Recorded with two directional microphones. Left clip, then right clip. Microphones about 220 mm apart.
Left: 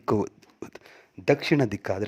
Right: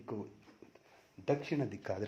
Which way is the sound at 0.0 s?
45° left (ahead or behind).